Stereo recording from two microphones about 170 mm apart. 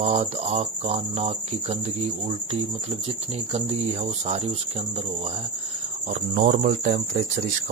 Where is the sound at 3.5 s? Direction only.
40° right (ahead or behind).